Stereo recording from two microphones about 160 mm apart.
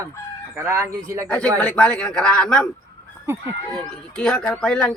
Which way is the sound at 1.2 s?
5° left (ahead or behind).